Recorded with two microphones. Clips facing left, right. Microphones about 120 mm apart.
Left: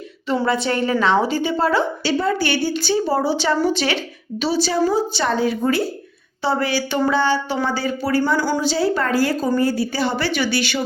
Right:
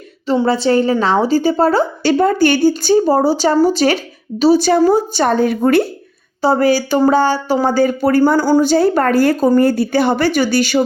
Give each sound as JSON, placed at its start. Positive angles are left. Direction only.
{"t": 0.4, "sound": "a woman's voice", "side_deg": -30}
{"t": 6.4, "sound": "speech", "side_deg": -40}